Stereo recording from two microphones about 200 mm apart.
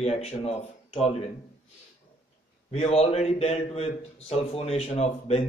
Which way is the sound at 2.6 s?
30° left (ahead or behind).